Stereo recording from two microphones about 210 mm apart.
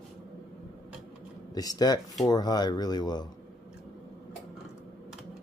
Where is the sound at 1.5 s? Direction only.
20° left (ahead or behind).